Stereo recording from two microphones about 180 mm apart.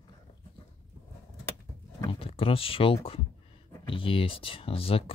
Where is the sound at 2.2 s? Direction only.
30° left (ahead or behind).